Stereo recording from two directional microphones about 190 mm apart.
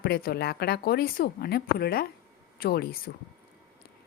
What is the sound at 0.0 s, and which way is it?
Speech, 55° left (ahead or behind).